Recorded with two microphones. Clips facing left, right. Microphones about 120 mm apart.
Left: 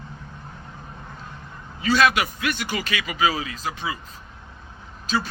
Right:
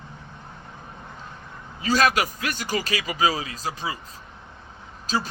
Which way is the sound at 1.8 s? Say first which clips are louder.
Left 1 dB; 40° right (ahead or behind).